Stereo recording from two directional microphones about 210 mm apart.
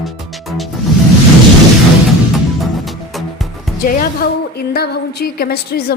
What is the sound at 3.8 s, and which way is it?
Music, 45° left (ahead or behind).